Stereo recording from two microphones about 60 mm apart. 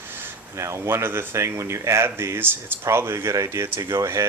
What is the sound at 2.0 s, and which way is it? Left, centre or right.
Speech, right.